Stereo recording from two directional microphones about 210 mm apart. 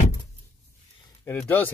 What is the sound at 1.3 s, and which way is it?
Speech, 10° left (ahead or behind).